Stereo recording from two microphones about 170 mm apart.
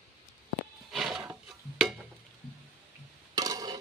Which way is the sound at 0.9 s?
Centre (ahead or behind).